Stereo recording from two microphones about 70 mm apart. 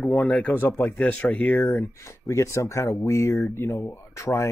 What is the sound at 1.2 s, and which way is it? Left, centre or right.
Speech, centre.